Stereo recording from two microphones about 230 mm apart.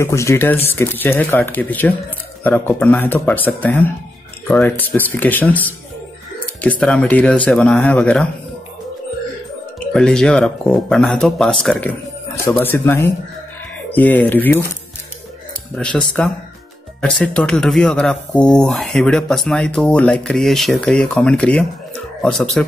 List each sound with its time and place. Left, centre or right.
0.0 s speech: centre
9.9 s speech: centre
15.7 s speech: centre